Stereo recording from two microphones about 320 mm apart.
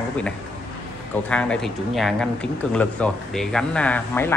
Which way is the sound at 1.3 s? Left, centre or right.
Centre.